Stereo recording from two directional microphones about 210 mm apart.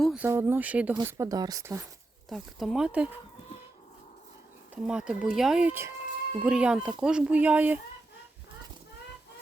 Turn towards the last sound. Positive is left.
turn(degrees=-5)  # may be behind; listen again after turning